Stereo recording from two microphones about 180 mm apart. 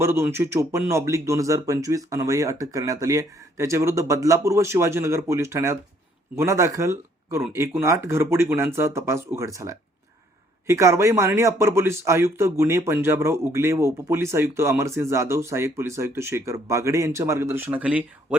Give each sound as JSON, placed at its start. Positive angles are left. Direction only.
{"t": 0.0, "sound": "speech", "side_deg": -15}